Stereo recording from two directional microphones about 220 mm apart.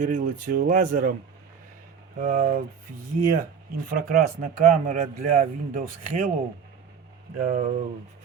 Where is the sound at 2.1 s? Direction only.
35° right (ahead or behind).